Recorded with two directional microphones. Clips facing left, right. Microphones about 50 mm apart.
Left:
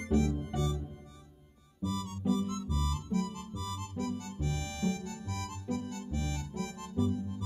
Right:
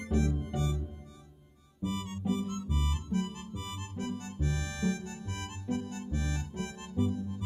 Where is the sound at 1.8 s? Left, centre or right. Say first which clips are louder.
Even; right.